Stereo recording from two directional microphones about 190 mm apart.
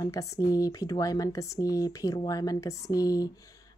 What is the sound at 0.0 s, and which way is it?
Speech, 15° left (ahead or behind).